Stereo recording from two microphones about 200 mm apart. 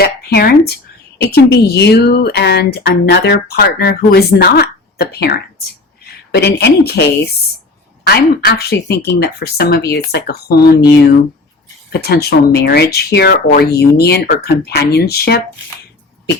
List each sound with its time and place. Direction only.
0.0 s a sound: 50° left (ahead or behind)
1.3 s speech: 55° left (ahead or behind)
8.1 s speech: 55° left (ahead or behind)